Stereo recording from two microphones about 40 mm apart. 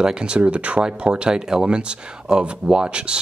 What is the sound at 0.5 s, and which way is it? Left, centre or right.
Speech, right.